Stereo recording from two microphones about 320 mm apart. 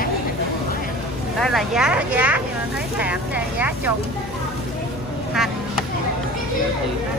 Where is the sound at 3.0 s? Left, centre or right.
Centre.